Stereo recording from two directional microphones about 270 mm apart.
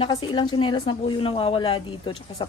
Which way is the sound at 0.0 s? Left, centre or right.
Centre.